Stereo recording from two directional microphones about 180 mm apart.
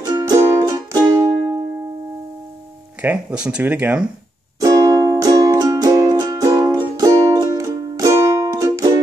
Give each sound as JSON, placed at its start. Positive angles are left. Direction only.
{"t": 0.0, "sound": "music", "side_deg": -20}
{"t": 3.0, "sound": "speech", "side_deg": -5}
{"t": 4.6, "sound": "music", "side_deg": -20}